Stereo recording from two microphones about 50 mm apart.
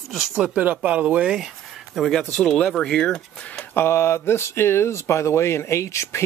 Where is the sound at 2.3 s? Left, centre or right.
Centre.